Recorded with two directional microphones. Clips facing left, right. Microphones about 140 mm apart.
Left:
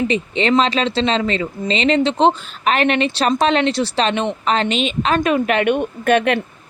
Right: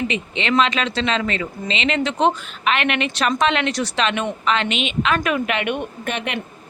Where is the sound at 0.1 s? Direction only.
35° left (ahead or behind).